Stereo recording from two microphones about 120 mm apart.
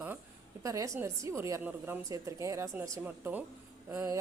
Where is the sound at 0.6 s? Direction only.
25° right (ahead or behind).